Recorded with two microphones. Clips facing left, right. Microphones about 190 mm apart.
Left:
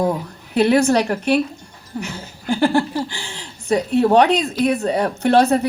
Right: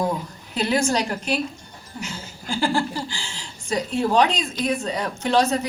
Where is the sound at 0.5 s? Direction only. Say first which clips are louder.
Left 7 dB; 60° left (ahead or behind).